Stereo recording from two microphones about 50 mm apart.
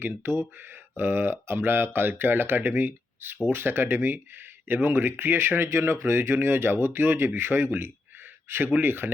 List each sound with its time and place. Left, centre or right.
0.2 s speech: right